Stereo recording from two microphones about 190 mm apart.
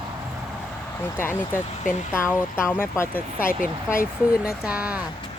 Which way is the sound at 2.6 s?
10° left (ahead or behind).